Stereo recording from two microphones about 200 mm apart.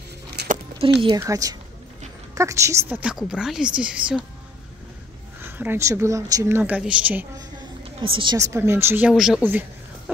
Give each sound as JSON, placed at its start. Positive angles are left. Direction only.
{"t": 0.5, "sound": "a sound", "side_deg": -30}
{"t": 1.0, "sound": "a woman's voice", "side_deg": -20}
{"t": 5.4, "sound": "speech", "side_deg": -10}
{"t": 8.0, "sound": "speech", "side_deg": -25}